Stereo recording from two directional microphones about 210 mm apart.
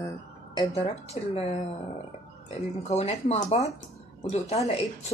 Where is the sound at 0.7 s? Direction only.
30° left (ahead or behind).